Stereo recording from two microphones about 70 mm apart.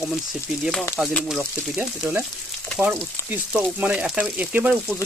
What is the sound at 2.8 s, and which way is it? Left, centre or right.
Frying, right.